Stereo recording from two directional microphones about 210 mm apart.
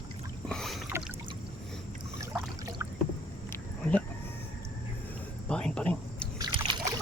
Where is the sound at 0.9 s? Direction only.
10° right (ahead or behind).